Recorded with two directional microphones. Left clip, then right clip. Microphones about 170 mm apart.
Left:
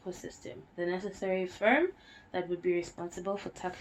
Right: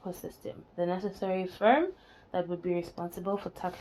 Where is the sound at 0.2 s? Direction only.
35° right (ahead or behind).